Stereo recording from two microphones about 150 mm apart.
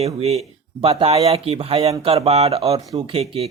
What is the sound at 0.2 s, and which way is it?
Speech, 45° right (ahead or behind).